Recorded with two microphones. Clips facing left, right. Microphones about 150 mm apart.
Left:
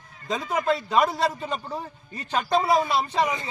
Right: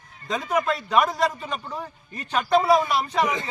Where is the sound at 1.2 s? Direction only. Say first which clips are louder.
Right 1 dB; 30° left (ahead or behind).